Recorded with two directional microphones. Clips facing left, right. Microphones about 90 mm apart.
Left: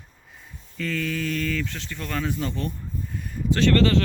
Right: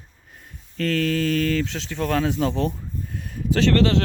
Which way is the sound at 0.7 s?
70° right (ahead or behind).